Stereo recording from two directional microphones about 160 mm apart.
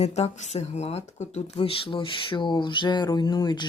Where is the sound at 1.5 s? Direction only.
35° left (ahead or behind).